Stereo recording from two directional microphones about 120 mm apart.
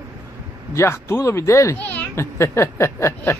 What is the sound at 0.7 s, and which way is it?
Speech, 25° left (ahead or behind).